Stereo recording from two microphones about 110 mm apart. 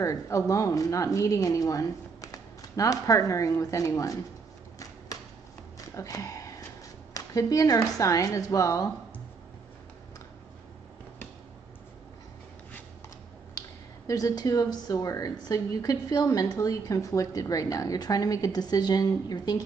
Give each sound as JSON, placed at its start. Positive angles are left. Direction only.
{"t": 0.0, "sound": "speech", "side_deg": 30}
{"t": 5.9, "sound": "speech", "side_deg": 30}
{"t": 13.6, "sound": "speech", "side_deg": 30}